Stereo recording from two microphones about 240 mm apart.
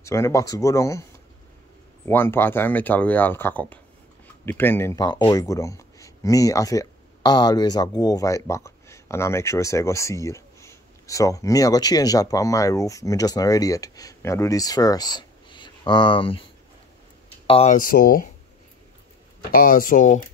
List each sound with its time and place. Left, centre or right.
0.0 s speech: centre
2.0 s speech: centre
17.5 s speech: left
19.5 s speech: left